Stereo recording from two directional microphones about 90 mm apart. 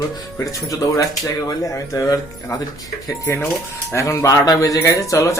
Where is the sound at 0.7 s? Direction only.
35° left (ahead or behind).